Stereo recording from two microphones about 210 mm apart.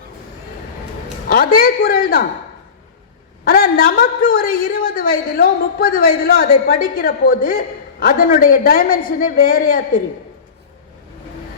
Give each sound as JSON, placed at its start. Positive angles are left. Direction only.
{"t": 1.3, "sound": "a woman's voice", "side_deg": 45}
{"t": 3.4, "sound": "a man's voice", "side_deg": 45}